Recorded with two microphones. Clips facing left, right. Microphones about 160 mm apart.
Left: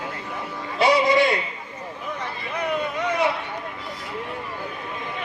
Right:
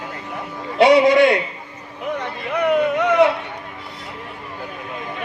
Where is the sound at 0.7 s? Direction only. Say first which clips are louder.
Right 6 dB; 65° right (ahead or behind).